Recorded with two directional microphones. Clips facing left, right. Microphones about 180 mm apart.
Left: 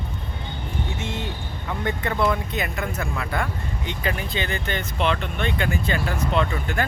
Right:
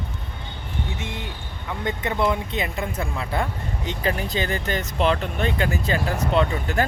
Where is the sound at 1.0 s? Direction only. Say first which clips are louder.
Left 3 dB; 15° right (ahead or behind).